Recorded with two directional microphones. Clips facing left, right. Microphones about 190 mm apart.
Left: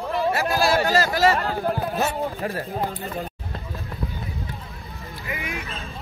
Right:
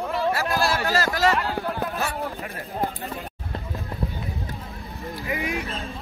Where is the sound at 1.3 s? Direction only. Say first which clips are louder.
Left 2 dB; 35° left (ahead or behind).